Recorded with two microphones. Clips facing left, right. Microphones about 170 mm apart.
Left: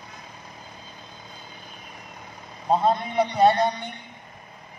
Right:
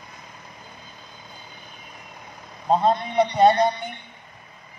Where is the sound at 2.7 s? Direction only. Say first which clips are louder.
Right 1 dB; 5° left (ahead or behind).